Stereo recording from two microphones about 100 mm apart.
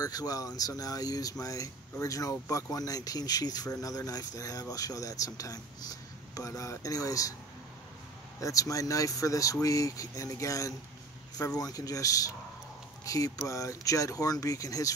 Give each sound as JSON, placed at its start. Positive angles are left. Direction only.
{"t": 0.0, "sound": "speech", "side_deg": 40}
{"t": 8.4, "sound": "speech", "side_deg": 35}